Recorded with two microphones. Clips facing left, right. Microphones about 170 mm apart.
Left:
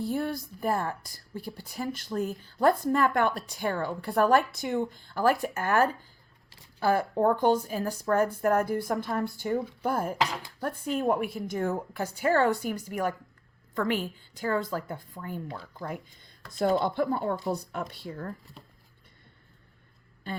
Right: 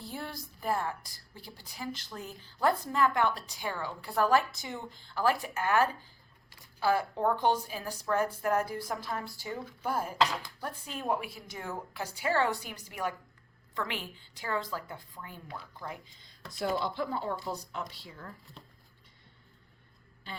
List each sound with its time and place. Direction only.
0.0 s a woman's voice: 55° left (ahead or behind)